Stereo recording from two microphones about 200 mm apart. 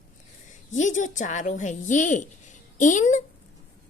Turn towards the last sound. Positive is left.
turn(degrees=40)  # may be behind; listen again after turning